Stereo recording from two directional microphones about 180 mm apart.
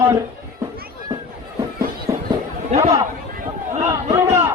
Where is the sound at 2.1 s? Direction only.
20° right (ahead or behind).